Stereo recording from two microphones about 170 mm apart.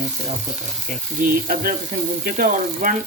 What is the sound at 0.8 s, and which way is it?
Speech, 55° right (ahead or behind).